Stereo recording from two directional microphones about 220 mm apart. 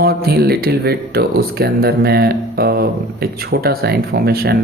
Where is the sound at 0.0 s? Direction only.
45° right (ahead or behind).